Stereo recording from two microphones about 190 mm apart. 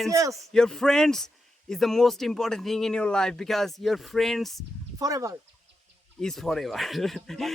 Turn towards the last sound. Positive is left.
turn(degrees=0)  # may be behind; listen again after turning